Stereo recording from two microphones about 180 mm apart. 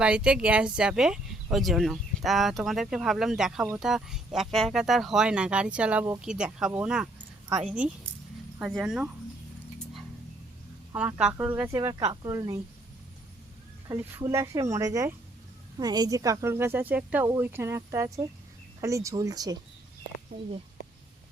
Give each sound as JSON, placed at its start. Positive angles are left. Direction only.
{"t": 0.0, "sound": "speech", "side_deg": -5}
{"t": 8.5, "sound": "speech", "side_deg": -5}
{"t": 10.9, "sound": "speech", "side_deg": -5}
{"t": 13.8, "sound": "speech", "side_deg": -20}